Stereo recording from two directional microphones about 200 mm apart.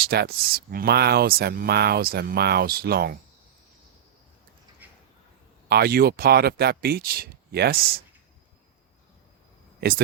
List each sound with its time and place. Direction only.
0.0 s speech: 50° right (ahead or behind)
5.6 s speech: 50° right (ahead or behind)